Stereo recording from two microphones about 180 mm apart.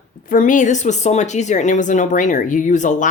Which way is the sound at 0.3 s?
45° left (ahead or behind).